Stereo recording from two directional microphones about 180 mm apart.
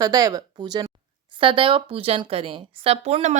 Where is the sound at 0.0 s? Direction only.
20° right (ahead or behind).